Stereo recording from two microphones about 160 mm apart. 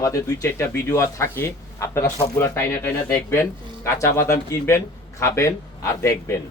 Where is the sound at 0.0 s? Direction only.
20° left (ahead or behind).